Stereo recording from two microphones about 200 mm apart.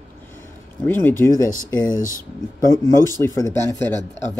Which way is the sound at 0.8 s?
10° left (ahead or behind).